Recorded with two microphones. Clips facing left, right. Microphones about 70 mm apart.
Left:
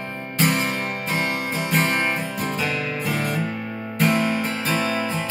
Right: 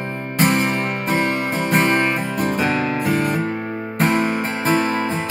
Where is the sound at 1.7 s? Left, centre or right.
Right.